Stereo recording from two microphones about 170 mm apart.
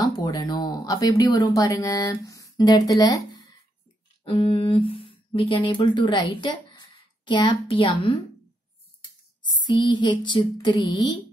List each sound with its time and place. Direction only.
0.2 s speech: 25° left (ahead or behind)
4.2 s a woman's voice: 30° left (ahead or behind)
9.8 s a sound: 30° left (ahead or behind)